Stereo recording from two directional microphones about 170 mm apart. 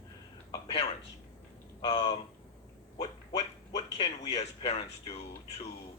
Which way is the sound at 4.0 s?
40° left (ahead or behind).